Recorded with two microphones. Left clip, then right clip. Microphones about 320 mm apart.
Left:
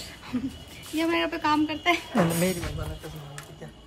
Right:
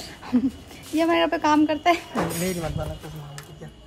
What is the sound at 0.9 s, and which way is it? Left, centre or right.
A woman's voice, centre.